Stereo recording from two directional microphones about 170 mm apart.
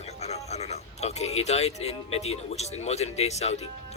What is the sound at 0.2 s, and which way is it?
Speech, 40° left (ahead or behind).